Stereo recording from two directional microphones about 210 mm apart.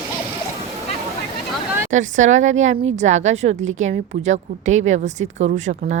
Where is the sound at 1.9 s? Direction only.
35° right (ahead or behind).